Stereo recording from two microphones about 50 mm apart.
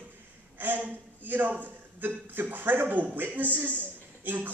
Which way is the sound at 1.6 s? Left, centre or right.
Right.